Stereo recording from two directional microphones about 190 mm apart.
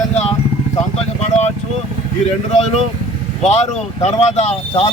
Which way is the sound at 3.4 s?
35° left (ahead or behind).